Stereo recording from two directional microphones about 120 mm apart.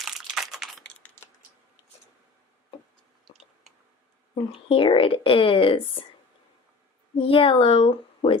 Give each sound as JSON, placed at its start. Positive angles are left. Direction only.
{"t": 0.0, "sound": "crumpling", "side_deg": 0}
{"t": 0.9, "sound": "a sound", "side_deg": 15}
{"t": 4.7, "sound": "a woman's voice", "side_deg": 45}
{"t": 7.2, "sound": "a woman's voice", "side_deg": 50}